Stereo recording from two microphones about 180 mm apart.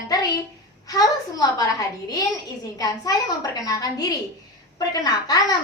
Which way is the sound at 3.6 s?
20° left (ahead or behind).